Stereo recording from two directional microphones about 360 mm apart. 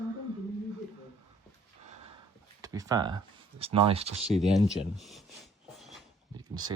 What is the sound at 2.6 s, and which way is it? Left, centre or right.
Speech, centre.